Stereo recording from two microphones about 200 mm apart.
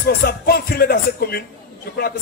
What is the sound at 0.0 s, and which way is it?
Speech, 50° left (ahead or behind).